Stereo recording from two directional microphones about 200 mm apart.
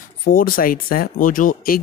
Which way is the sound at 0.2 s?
45° left (ahead or behind).